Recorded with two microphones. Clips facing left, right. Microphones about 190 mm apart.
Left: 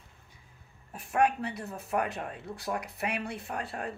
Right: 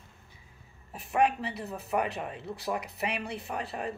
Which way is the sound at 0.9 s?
Centre (ahead or behind).